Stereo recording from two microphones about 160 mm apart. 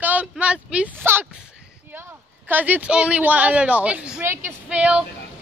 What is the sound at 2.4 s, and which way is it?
A man's voice, 10° right (ahead or behind).